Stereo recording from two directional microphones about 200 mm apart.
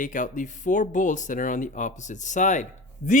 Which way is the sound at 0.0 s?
40° left (ahead or behind).